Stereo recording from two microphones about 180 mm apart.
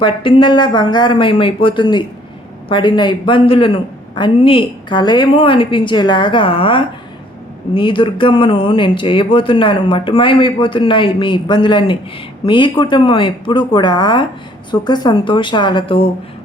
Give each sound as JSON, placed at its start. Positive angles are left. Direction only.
{"t": 0.0, "sound": "speech", "side_deg": 30}